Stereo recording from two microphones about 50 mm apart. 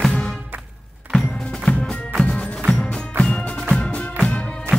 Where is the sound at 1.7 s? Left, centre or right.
Left.